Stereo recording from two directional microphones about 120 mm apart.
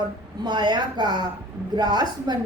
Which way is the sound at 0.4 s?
40° right (ahead or behind).